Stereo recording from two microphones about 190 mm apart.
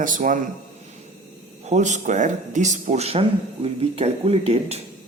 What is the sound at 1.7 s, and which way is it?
Speech, 40° right (ahead or behind).